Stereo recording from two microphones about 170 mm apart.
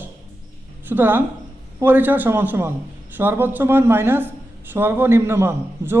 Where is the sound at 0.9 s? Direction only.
10° right (ahead or behind).